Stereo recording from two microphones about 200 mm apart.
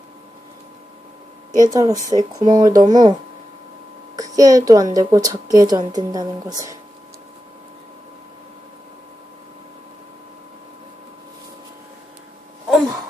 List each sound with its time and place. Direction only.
1.5 s speech: 20° right (ahead or behind)
4.2 s speech: 20° right (ahead or behind)